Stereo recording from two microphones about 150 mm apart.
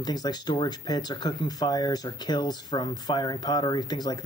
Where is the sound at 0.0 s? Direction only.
25° left (ahead or behind).